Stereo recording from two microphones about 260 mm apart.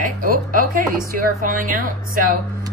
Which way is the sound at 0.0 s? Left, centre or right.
Right.